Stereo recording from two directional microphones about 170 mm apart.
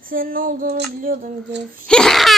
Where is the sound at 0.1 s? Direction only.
55° right (ahead or behind).